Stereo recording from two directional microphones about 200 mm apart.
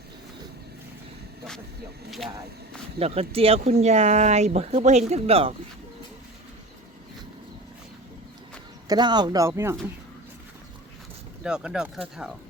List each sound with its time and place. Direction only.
2.0 s speech: centre (ahead or behind)
3.0 s speech: 30° right (ahead or behind)
8.9 s speech: 20° right (ahead or behind)
11.4 s speech: 5° right (ahead or behind)